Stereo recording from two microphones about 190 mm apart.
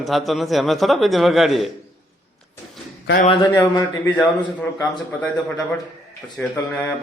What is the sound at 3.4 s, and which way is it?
A man's voice, 15° left (ahead or behind).